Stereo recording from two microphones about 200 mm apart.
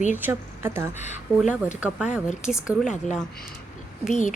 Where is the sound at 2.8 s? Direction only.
35° left (ahead or behind).